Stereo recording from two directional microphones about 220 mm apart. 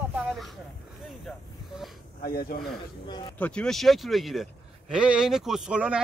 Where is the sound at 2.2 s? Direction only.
45° left (ahead or behind).